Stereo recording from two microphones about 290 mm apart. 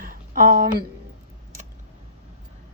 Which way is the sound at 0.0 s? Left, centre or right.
Right.